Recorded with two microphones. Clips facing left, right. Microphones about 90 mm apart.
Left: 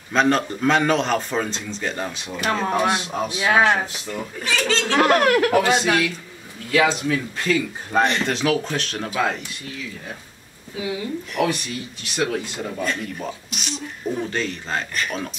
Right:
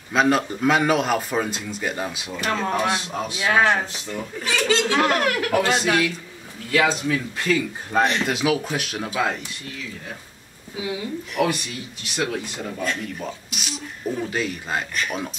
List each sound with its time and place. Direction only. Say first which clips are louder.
0.1 s a man's voice: even; 5° right (ahead or behind)
2.3 s speech: left 2 dB; 10° left (ahead or behind)
4.5 s a man's voice: right 1 dB; 15° right (ahead or behind)
5.0 s speech: left 5 dB; 45° left (ahead or behind)
5.6 s speech: left 2 dB; 15° left (ahead or behind)
5.9 s a man's voice: even; 5° right (ahead or behind)
10.8 s a man's voice: left 1 dB; centre (ahead or behind)